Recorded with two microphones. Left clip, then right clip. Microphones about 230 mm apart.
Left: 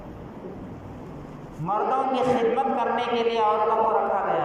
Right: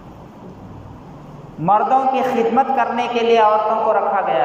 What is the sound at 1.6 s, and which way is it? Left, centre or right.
A man's voice, right.